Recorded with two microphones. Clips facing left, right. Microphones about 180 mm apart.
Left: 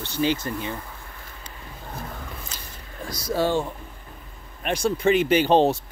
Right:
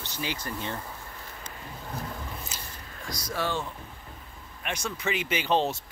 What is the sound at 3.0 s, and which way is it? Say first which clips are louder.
Speech: left 8 dB; 30° left (ahead or behind).